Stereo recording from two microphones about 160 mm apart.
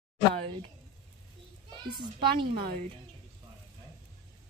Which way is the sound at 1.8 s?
30° right (ahead or behind).